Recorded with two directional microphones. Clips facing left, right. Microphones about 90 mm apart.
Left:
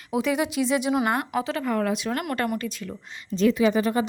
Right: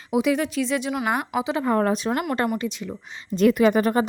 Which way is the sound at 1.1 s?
10° right (ahead or behind).